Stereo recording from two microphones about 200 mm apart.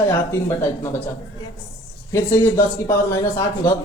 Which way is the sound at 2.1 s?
15° left (ahead or behind).